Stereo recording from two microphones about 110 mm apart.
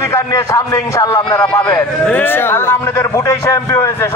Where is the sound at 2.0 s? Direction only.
15° left (ahead or behind).